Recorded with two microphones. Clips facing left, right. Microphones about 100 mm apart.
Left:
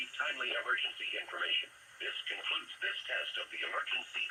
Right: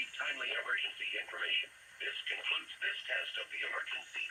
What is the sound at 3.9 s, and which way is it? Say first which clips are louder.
Speech: left 3 dB; 50° left (ahead or behind).